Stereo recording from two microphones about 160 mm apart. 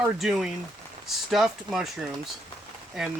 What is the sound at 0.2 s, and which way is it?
Speech, 5° right (ahead or behind).